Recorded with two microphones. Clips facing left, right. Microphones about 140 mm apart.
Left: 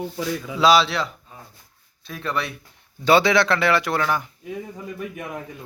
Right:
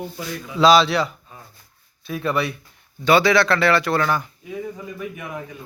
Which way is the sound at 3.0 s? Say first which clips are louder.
Right 1 dB; 25° left (ahead or behind).